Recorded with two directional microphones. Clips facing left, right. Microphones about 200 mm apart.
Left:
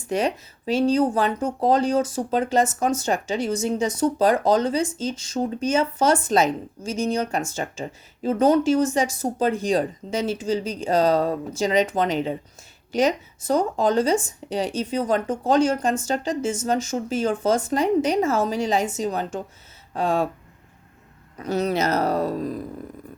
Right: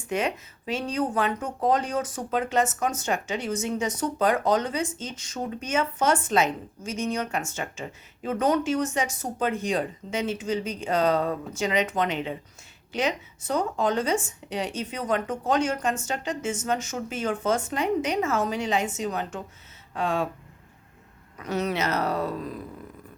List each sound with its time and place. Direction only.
0.1 s speech: 35° left (ahead or behind)
21.3 s speech: 35° left (ahead or behind)